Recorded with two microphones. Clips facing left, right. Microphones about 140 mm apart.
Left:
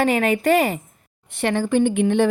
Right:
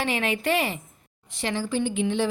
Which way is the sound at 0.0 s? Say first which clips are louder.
Left 8 dB; 45° left (ahead or behind).